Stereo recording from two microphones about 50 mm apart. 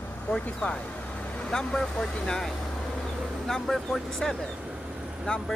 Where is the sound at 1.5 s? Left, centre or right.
Centre.